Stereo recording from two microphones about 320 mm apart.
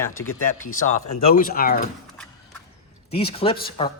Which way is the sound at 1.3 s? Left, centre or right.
Left.